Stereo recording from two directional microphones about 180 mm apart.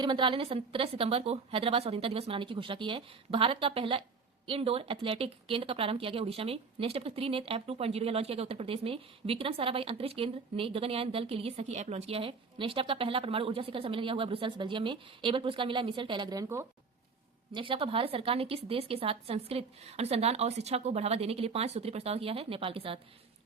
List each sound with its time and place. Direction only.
0.0 s speech: 25° right (ahead or behind)
17.5 s speech: 30° right (ahead or behind)